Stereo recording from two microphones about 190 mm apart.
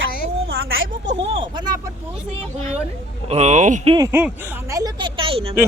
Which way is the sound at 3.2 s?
35° right (ahead or behind).